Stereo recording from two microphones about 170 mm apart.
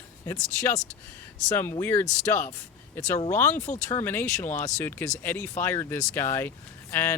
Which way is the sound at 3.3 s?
10° left (ahead or behind).